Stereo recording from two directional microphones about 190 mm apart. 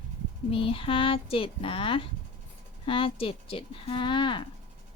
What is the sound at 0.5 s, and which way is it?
Speech, 30° left (ahead or behind).